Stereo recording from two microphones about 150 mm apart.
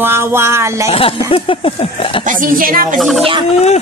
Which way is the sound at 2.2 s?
60° right (ahead or behind).